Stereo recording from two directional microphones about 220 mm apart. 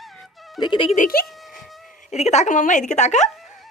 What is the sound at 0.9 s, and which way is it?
A woman's voice, 40° left (ahead or behind).